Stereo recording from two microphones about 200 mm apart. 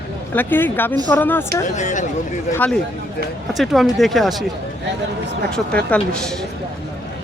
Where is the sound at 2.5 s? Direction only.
5° left (ahead or behind).